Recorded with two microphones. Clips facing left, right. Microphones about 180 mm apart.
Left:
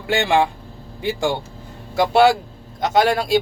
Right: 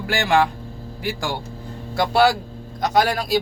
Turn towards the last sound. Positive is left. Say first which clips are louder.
# left 3 dB
turn(degrees=25)  # may be behind; listen again after turning